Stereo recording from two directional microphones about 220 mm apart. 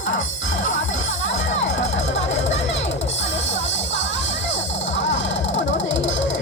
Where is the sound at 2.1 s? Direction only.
30° left (ahead or behind).